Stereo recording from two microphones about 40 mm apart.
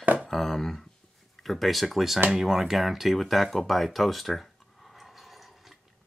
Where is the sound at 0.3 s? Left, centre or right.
Centre.